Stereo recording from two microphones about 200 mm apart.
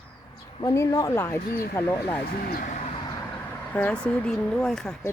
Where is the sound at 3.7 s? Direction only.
10° left (ahead or behind).